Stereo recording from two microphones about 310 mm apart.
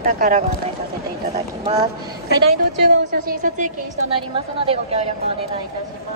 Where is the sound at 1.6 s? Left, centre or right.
Centre.